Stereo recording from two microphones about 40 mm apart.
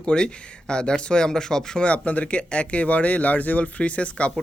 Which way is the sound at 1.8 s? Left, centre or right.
Left.